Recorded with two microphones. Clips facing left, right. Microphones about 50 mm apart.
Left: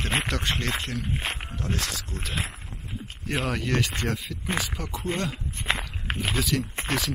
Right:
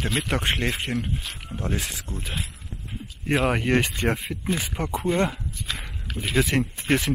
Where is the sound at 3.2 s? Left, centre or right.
Right.